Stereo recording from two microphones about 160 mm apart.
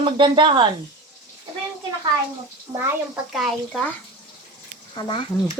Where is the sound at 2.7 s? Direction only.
25° right (ahead or behind).